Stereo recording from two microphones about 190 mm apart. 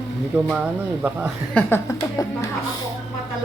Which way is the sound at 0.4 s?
5° right (ahead or behind).